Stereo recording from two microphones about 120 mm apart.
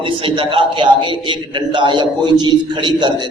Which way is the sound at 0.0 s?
45° right (ahead or behind).